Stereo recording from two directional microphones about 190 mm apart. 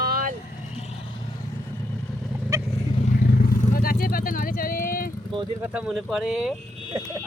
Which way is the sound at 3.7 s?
50° left (ahead or behind).